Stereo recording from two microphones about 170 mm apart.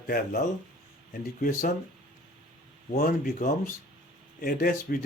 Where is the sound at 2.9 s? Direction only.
50° left (ahead or behind).